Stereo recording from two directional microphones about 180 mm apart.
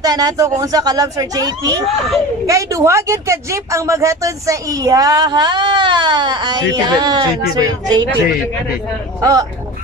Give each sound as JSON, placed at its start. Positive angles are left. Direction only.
{"t": 0.0, "sound": "speech", "side_deg": -20}
{"t": 9.2, "sound": "speech", "side_deg": -20}